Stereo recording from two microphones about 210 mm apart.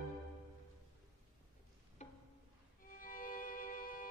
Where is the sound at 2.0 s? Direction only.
35° left (ahead or behind).